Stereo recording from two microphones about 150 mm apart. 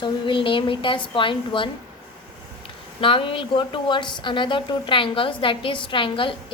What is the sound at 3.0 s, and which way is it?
A woman's voice, 35° left (ahead or behind).